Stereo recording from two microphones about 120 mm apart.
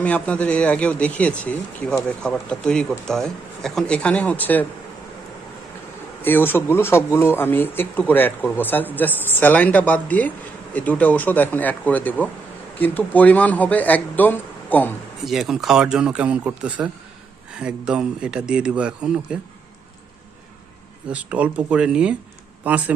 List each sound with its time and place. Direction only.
0.0 s speech: 10° left (ahead or behind)
6.2 s speech: 15° left (ahead or behind)
15.2 s a man's voice: centre (ahead or behind)
21.1 s a man's voice: 10° right (ahead or behind)